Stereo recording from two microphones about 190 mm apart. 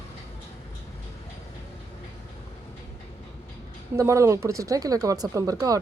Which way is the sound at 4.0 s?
15° right (ahead or behind).